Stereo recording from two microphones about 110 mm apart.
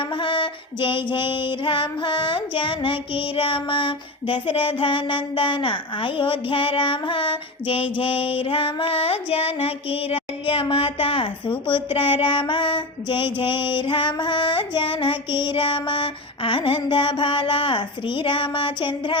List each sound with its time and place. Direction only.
0.2 s female singing: 50° left (ahead or behind)